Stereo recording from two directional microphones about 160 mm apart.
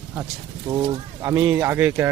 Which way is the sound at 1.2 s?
15° right (ahead or behind).